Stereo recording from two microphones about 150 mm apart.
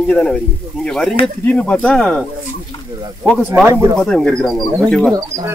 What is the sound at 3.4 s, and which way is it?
Speech, 10° right (ahead or behind).